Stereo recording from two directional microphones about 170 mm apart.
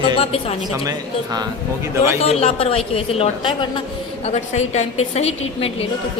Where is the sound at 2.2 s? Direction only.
40° left (ahead or behind).